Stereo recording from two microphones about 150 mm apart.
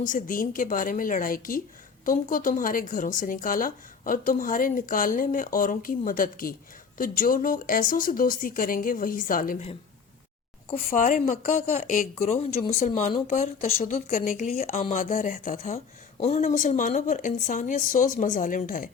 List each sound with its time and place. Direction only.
0.0 s speech: 65° left (ahead or behind)
10.8 s speech: 65° left (ahead or behind)
12.2 s speech: 45° left (ahead or behind)
13.6 s speech: 55° left (ahead or behind)
14.6 s speech: 45° left (ahead or behind)
15.1 s speech: 65° left (ahead or behind)